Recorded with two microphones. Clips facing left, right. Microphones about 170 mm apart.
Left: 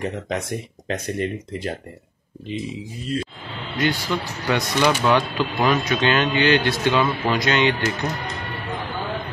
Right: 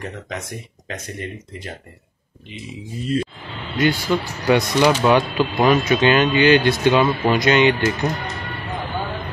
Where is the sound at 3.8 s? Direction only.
15° right (ahead or behind).